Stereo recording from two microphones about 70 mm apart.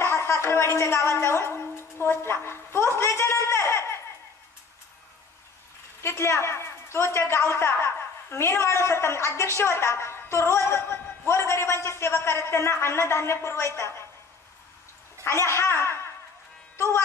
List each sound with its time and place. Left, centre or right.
0.0 s a sound: left
6.0 s a woman's voice: left
15.2 s a woman's voice: left